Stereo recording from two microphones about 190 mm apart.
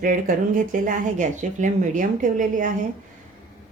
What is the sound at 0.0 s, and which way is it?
Speech, 45° right (ahead or behind).